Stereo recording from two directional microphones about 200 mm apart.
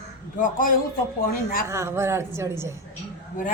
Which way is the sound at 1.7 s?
15° right (ahead or behind).